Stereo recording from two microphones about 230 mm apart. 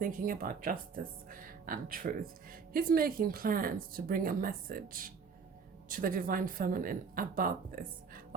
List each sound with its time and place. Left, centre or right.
0.0 s speech: right